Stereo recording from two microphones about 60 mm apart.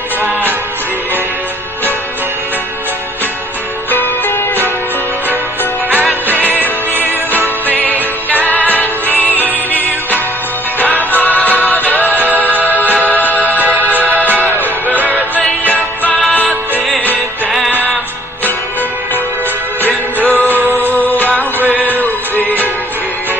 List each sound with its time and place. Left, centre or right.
3.9 s music: left
6.4 s music: left
10.9 s music: left
13.6 s music: right
15.7 s music: left
20.2 s music: left
21.5 s music: right
22.0 s music: left